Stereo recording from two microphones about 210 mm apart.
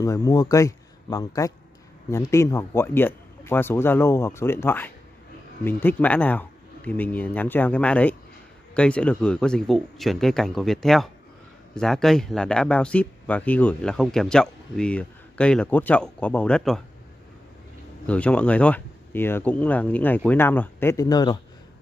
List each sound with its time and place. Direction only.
0.0 s a man's voice: 15° left (ahead or behind)
18.0 s speech: 5° left (ahead or behind)